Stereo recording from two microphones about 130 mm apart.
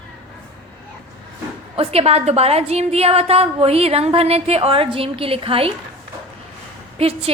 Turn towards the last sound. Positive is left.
turn(degrees=-50)  # may be behind; listen again after turning